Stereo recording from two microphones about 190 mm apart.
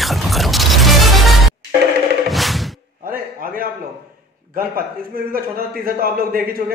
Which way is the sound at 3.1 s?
50° right (ahead or behind).